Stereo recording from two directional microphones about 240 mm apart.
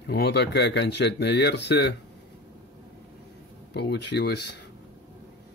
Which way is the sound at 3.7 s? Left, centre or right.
Left.